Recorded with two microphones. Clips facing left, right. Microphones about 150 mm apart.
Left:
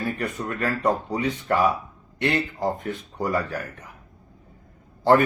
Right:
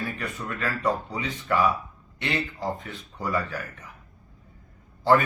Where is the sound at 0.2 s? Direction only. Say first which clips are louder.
Left 4 dB; 45° left (ahead or behind).